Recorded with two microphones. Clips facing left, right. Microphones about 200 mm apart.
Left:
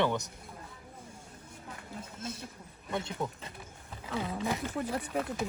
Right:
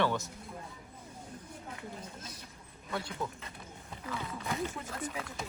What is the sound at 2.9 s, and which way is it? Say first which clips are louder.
Speech: left 3 dB; 20° left (ahead or behind).